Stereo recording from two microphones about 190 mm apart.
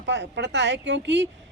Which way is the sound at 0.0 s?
70° right (ahead or behind).